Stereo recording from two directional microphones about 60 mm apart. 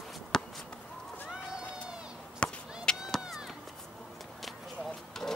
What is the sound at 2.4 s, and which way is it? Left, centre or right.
Chop, centre.